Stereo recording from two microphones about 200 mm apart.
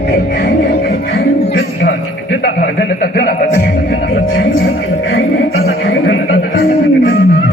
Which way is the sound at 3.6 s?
60° left (ahead or behind).